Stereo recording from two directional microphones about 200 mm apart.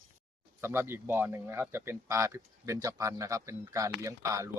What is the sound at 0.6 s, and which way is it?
A man's voice, 10° right (ahead or behind).